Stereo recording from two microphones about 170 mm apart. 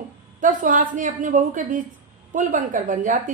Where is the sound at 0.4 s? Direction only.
50° right (ahead or behind).